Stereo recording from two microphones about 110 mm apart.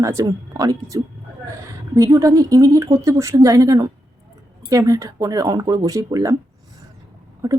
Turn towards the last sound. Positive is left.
turn(degrees=-30)  # may be behind; listen again after turning